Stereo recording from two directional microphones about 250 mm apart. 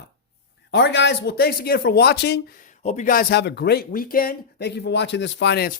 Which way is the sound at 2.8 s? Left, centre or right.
Left.